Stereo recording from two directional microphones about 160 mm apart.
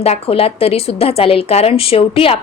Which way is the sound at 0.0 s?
40° left (ahead or behind).